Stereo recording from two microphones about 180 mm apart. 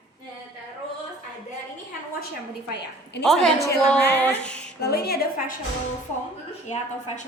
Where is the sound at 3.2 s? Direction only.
5° left (ahead or behind).